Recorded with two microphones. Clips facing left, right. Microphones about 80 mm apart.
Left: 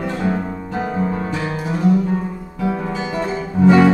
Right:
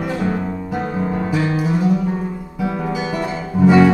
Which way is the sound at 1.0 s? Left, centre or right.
Centre.